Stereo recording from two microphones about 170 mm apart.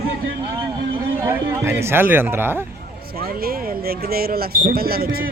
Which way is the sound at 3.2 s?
60° right (ahead or behind).